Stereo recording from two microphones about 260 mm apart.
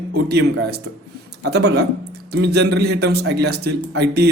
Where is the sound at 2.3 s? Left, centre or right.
Right.